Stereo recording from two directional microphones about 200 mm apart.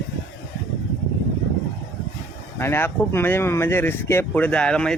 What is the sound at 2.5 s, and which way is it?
Speech, 10° left (ahead or behind).